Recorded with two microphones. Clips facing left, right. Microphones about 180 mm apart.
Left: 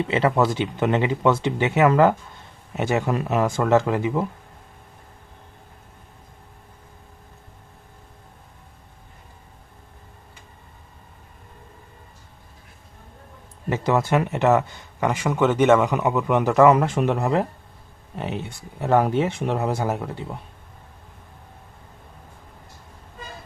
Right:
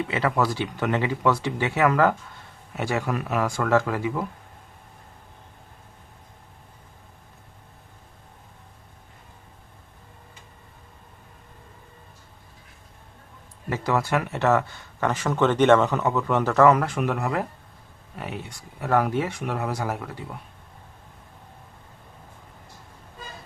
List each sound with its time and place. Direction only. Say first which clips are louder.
0.1 s speech: left 5 dB; 25° left (ahead or behind)
13.7 s speech: left 3 dB; 20° left (ahead or behind)